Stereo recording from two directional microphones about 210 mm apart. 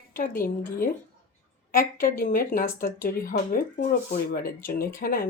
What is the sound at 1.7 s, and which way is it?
Speech, 40° left (ahead or behind).